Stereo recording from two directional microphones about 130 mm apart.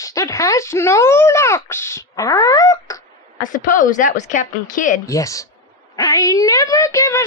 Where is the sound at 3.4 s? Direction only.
90° left; by 4.4 s 70° left (ahead or behind).